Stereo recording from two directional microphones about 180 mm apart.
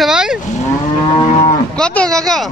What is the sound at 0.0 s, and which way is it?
Moo, 5° right (ahead or behind).